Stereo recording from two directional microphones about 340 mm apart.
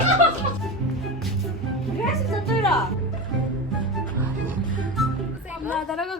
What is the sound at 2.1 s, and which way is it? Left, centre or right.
Music, centre.